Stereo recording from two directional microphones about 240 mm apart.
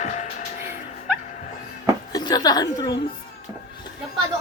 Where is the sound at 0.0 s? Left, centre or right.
Left.